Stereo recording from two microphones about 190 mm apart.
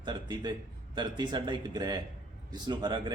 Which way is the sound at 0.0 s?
25° right (ahead or behind).